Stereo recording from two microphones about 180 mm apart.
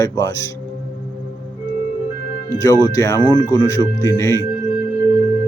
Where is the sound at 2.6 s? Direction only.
20° left (ahead or behind).